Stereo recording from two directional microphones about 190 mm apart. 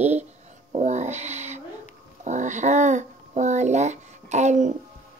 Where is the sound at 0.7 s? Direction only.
40° right (ahead or behind).